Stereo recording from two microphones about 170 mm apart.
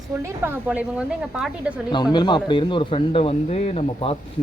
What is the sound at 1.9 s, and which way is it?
Speech, 25° left (ahead or behind).